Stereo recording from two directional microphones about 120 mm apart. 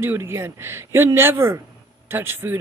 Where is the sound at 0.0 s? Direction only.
20° right (ahead or behind).